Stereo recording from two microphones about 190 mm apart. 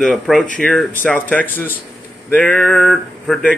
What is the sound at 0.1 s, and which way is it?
A man's voice, centre (ahead or behind).